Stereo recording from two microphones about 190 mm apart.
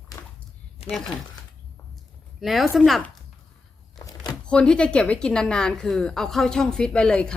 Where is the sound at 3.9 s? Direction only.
20° left (ahead or behind).